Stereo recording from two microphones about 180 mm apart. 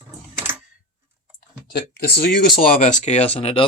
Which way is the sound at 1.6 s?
65° left (ahead or behind).